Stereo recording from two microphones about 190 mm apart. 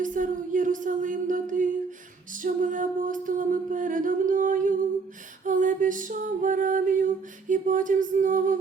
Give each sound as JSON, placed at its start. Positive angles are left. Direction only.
{"t": 0.0, "sound": "music", "side_deg": -45}